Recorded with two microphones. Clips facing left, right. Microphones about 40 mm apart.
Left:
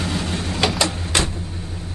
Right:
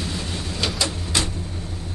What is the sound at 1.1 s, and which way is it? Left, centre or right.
Vehicle, left.